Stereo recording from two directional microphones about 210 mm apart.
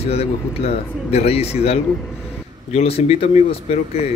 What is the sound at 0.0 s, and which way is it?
Speech, 30° left (ahead or behind).